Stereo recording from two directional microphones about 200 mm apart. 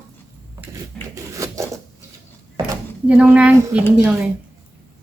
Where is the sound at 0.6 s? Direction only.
15° right (ahead or behind).